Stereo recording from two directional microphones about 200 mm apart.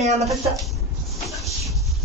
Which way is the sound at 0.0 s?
35° right (ahead or behind).